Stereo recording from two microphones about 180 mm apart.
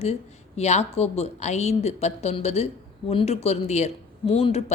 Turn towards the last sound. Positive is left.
turn(degrees=35)  # may be behind; listen again after turning